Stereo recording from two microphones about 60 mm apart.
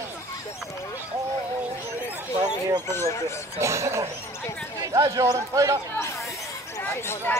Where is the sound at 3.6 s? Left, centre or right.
Right.